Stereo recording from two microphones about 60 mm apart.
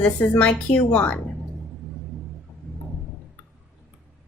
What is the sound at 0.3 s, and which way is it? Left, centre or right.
Speech, left.